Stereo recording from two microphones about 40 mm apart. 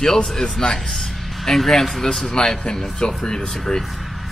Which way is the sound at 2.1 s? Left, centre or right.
Centre.